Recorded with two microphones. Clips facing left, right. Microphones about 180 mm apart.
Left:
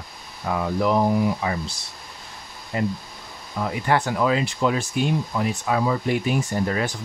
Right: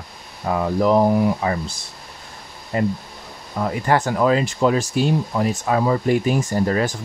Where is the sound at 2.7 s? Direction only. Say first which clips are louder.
Right 4 dB; 45° right (ahead or behind).